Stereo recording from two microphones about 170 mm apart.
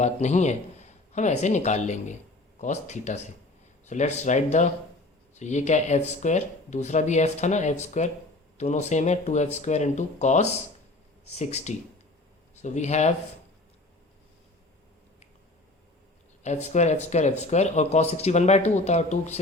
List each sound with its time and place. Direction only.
0.0 s speech: 45° left (ahead or behind)
16.4 s speech: 40° left (ahead or behind)